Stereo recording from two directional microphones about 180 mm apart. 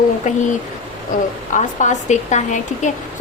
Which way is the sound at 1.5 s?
45° left (ahead or behind).